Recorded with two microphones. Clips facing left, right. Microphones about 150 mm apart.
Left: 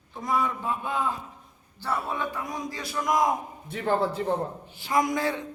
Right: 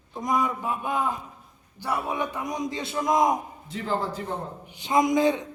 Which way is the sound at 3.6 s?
60° left (ahead or behind).